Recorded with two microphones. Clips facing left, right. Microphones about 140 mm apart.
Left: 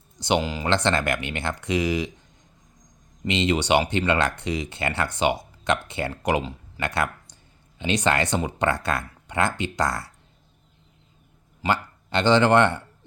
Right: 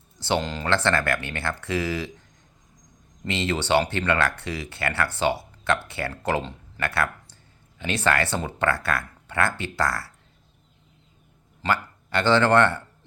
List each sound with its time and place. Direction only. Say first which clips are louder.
0.2 s speech: left 2 dB; 15° left (ahead or behind)
3.2 s speech: left 3 dB; 20° left (ahead or behind)
11.6 s speech: left 1 dB; 20° left (ahead or behind)